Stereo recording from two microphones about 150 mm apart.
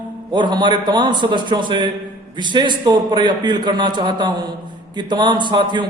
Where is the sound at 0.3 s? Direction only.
30° right (ahead or behind).